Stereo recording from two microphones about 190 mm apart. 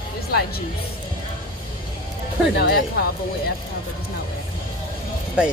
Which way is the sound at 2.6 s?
55° left (ahead or behind).